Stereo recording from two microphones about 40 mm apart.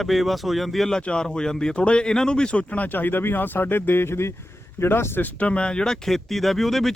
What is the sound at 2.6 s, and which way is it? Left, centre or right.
Speech, left.